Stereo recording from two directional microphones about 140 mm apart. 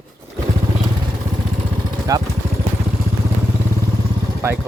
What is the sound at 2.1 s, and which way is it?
Speech, 25° right (ahead or behind).